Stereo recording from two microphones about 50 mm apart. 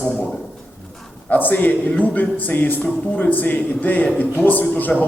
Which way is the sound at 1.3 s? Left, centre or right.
Left.